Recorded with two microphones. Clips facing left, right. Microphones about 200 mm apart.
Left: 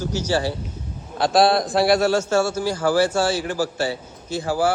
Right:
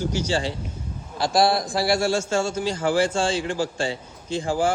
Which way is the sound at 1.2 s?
60° left (ahead or behind).